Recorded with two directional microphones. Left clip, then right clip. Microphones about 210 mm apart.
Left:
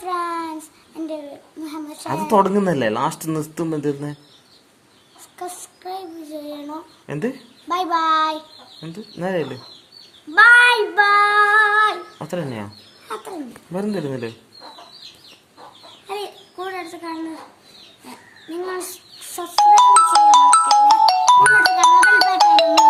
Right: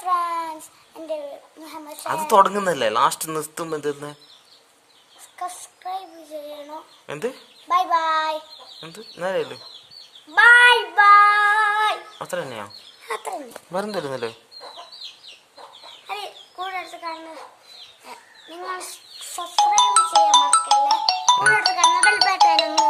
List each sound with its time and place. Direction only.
0.0 s child singing: centre (ahead or behind)
0.9 s a sound: centre (ahead or behind)
2.2 s speech: 15° right (ahead or behind)
5.4 s child singing: 5° left (ahead or behind)
7.1 s speech: 15° right (ahead or behind)
7.7 s child singing: centre (ahead or behind)
8.8 s speech: 15° right (ahead or behind)
10.3 s child singing: centre (ahead or behind)
13.7 s speech: 20° right (ahead or behind)
16.0 s chicken: 5° right (ahead or behind)
18.6 s child singing: centre (ahead or behind)
19.5 s music: 45° left (ahead or behind)